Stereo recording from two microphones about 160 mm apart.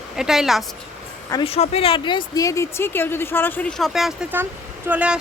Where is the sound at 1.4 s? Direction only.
40° left (ahead or behind).